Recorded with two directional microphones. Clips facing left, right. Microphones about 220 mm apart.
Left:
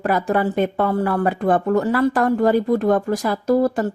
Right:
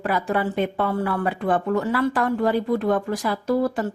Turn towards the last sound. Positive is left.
turn(degrees=45)  # may be behind; listen again after turning